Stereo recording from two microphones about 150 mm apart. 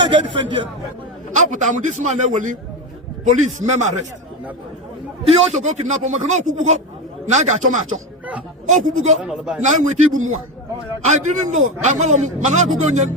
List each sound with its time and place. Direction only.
0.1 s speech: 35° right (ahead or behind)
1.4 s a man's voice: 55° right (ahead or behind)
3.6 s a man's voice: 55° right (ahead or behind)
5.3 s a man's voice: 45° right (ahead or behind)
9.2 s speech: 5° right (ahead or behind)
9.6 s a man's voice: 55° right (ahead or behind)